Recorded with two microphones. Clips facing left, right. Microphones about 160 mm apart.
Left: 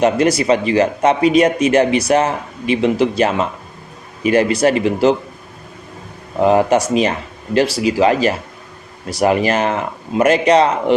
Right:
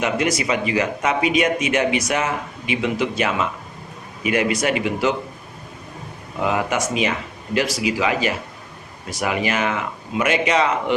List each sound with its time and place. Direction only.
0.0 s speech: 35° left (ahead or behind)
6.4 s speech: 35° left (ahead or behind)